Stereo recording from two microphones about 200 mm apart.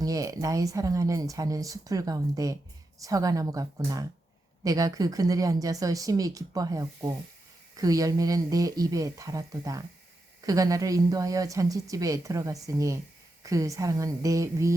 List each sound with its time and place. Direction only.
0.0 s speech: 15° right (ahead or behind)